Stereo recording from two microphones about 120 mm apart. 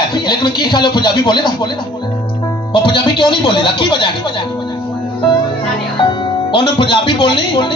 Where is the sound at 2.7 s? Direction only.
40° left (ahead or behind).